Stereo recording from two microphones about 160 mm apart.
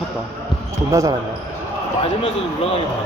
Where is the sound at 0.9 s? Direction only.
20° right (ahead or behind).